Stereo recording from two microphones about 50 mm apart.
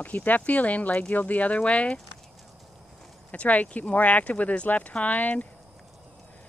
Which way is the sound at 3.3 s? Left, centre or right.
Left.